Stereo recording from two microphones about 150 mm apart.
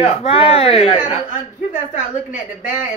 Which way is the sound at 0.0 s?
40° left (ahead or behind).